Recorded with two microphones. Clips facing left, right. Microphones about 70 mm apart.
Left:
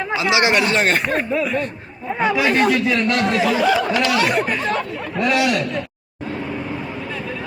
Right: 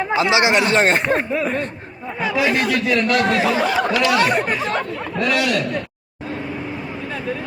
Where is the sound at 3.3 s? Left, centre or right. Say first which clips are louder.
Even; right.